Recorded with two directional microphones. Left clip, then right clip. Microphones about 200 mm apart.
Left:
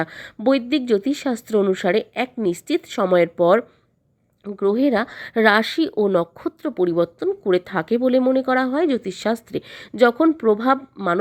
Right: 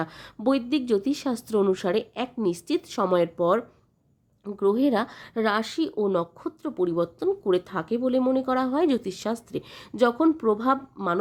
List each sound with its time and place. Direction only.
0.0 s speech: 15° left (ahead or behind)